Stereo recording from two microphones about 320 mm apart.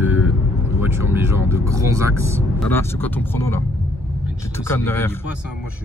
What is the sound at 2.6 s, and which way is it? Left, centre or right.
Speech, centre.